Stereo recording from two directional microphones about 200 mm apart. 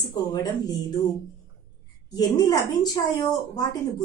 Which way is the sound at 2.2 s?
20° left (ahead or behind).